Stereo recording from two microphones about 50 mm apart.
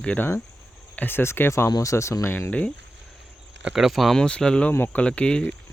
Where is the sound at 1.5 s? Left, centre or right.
Left.